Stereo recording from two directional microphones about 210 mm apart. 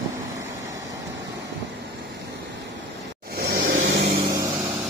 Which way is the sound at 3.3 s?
50° right (ahead or behind).